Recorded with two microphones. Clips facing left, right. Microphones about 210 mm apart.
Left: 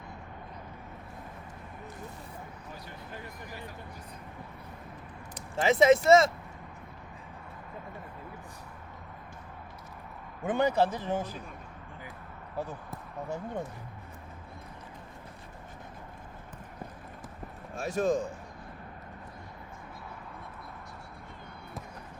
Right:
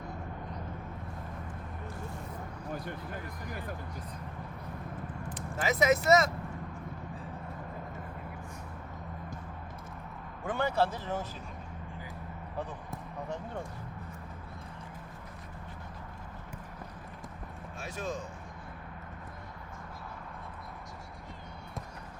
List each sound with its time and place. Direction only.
3.5 s speech: 55° right (ahead or behind)
5.5 s speech: 30° left (ahead or behind)
10.4 s speech: 20° left (ahead or behind)
12.5 s speech: 10° left (ahead or behind)
17.7 s speech: 45° left (ahead or behind)